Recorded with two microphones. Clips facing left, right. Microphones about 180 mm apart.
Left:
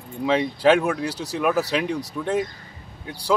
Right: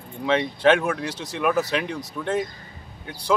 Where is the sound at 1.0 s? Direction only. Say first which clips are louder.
Left 3 dB; 35° left (ahead or behind).